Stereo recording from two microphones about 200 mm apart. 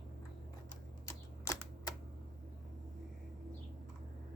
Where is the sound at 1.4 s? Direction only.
15° left (ahead or behind).